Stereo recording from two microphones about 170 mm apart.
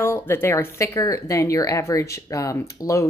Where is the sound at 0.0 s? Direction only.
15° left (ahead or behind).